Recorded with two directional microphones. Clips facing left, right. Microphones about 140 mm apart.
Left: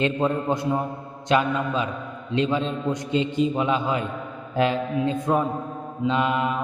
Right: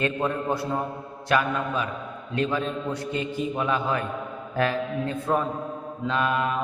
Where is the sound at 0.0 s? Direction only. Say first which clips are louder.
Left 3 dB; 20° left (ahead or behind).